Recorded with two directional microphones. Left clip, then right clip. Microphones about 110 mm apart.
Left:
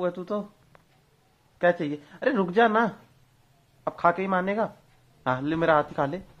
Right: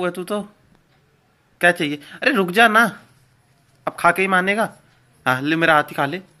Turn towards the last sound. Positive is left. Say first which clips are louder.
# right 6 dB
turn(degrees=20)  # may be behind; listen again after turning